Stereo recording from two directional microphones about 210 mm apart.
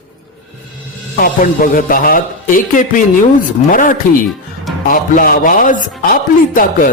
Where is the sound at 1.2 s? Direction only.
40° left (ahead or behind).